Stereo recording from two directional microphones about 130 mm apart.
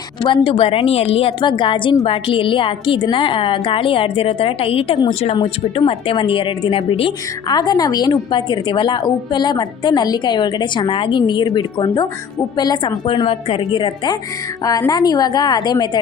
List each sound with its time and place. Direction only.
0.2 s a woman's voice: 35° left (ahead or behind)
7.4 s a woman's voice: 30° left (ahead or behind)